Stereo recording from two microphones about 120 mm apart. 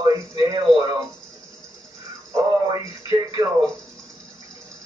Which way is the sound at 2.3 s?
30° right (ahead or behind).